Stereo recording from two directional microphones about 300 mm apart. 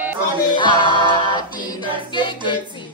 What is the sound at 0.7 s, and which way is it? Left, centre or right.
Music, centre.